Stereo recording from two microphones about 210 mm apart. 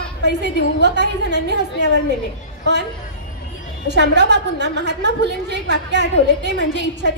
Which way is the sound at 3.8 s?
55° right (ahead or behind).